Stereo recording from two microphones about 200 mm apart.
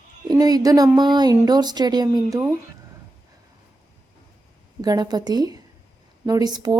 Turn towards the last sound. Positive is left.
turn(degrees=-20)  # may be behind; listen again after turning